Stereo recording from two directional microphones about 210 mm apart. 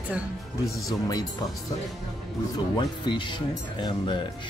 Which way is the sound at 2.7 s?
20° left (ahead or behind).